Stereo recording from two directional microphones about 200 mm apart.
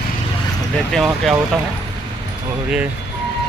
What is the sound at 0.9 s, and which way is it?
Speech, centre (ahead or behind).